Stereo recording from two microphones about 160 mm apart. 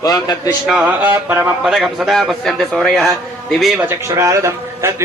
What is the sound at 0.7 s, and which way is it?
A man's voice, 5° right (ahead or behind).